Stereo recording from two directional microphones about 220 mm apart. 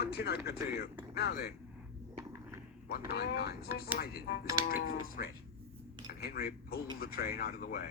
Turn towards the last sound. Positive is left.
turn(degrees=45)  # may be behind; listen again after turning